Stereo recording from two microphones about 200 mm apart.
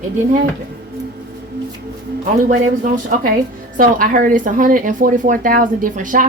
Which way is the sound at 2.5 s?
40° right (ahead or behind).